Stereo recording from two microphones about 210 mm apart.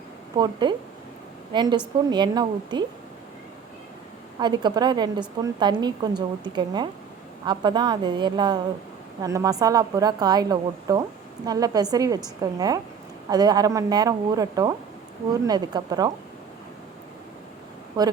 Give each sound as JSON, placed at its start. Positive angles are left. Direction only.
{"t": 0.3, "sound": "a woman's voice", "side_deg": -20}
{"t": 4.4, "sound": "a woman's voice", "side_deg": -20}
{"t": 18.0, "sound": "a woman's voice", "side_deg": -20}